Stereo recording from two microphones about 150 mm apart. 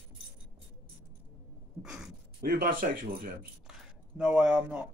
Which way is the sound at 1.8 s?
5° right (ahead or behind).